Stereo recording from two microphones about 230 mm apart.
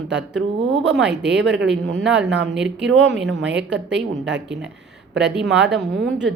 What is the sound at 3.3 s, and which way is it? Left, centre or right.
Speech, right.